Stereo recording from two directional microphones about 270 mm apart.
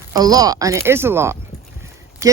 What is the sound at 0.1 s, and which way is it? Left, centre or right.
Speech, centre.